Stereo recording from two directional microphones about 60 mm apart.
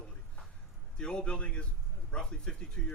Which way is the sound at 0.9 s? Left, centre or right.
Centre.